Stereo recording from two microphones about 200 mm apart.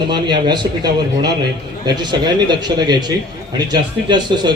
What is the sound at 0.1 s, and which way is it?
Speech, 20° right (ahead or behind).